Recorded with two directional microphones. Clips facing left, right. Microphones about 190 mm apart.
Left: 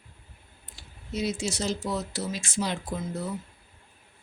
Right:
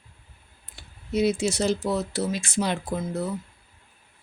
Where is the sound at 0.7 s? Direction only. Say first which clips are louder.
Right 7 dB; 60° right (ahead or behind).